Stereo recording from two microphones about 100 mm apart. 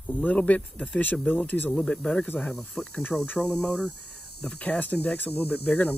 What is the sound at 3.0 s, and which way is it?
Speech, 20° left (ahead or behind).